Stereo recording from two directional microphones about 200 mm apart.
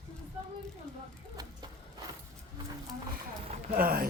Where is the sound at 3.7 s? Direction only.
50° right (ahead or behind).